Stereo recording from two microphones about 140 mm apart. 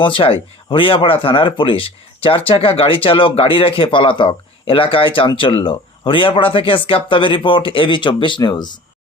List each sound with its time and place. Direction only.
0.0 s speech: 40° left (ahead or behind)